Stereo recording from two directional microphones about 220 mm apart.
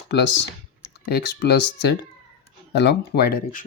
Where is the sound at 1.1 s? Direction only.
45° left (ahead or behind).